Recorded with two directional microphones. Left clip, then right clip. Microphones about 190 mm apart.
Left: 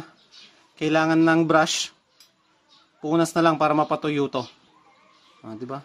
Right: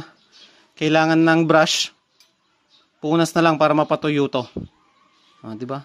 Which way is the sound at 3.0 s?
40° right (ahead or behind).